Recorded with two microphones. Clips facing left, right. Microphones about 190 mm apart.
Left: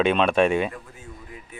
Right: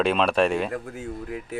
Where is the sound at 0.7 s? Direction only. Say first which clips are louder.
Right 9 dB; 70° right (ahead or behind).